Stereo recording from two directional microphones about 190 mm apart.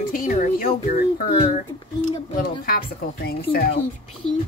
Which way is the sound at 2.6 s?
55° left (ahead or behind).